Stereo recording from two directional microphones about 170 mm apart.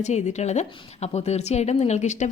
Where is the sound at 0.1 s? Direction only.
40° left (ahead or behind).